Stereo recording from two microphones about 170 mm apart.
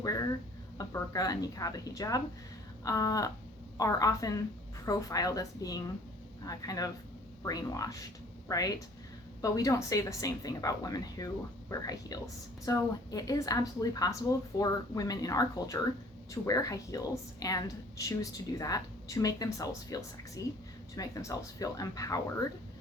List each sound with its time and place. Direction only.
0.0 s a woman's voice: 20° left (ahead or behind)